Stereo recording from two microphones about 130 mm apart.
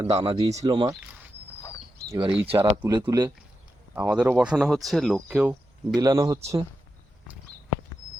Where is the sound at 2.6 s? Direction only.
25° right (ahead or behind).